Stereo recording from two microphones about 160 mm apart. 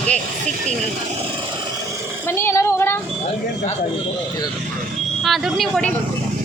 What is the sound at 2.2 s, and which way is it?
Child singing, 15° left (ahead or behind).